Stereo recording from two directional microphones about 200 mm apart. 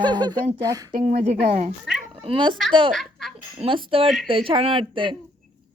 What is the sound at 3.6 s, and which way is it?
A woman's voice, 25° right (ahead or behind).